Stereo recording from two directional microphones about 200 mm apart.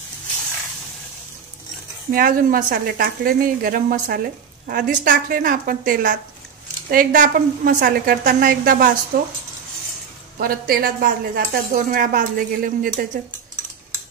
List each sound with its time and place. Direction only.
2.1 s a woman's voice: 45° right (ahead or behind)
10.4 s a woman's voice: 45° right (ahead or behind)